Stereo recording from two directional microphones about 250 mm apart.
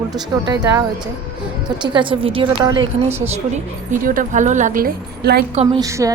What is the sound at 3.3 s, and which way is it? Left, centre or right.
A woman's voice, right.